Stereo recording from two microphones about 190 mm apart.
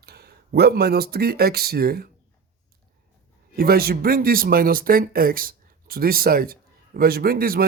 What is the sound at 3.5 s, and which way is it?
A man's voice, 55° right (ahead or behind).